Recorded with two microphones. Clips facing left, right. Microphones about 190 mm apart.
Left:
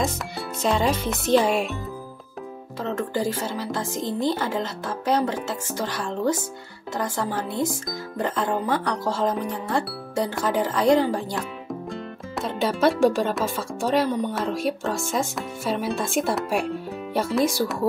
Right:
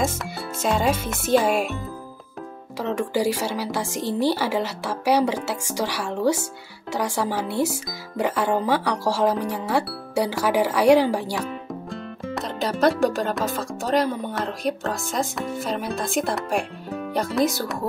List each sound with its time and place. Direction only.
0.7 s speech: 5° right (ahead or behind)
3.1 s speech: 85° right
3.5 s speech: 10° right (ahead or behind)
4.0 s a woman's voice: 75° right (ahead or behind)
5.1 s speech: 10° right (ahead or behind)
7.4 s a woman's voice: 70° right (ahead or behind)
8.2 s speech: 10° right (ahead or behind)
11.9 s speech: centre (ahead or behind)